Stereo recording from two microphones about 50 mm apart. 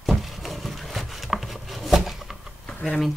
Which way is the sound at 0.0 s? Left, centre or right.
Centre.